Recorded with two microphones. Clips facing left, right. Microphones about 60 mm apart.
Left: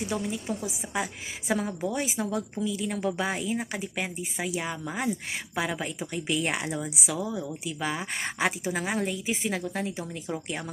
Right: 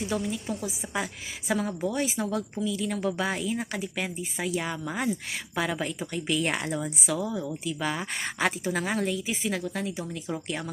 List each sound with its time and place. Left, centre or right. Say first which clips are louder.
0.0 s a woman's voice: right 1 dB; left